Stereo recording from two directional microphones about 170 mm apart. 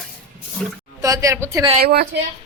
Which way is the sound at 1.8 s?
65° right (ahead or behind).